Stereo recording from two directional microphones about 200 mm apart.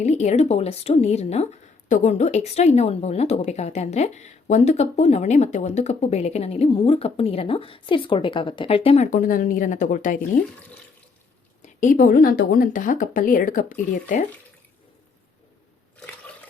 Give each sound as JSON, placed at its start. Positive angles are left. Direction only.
{"t": 0.0, "sound": "a woman's voice", "side_deg": 35}
{"t": 11.6, "sound": "a woman's voice", "side_deg": 40}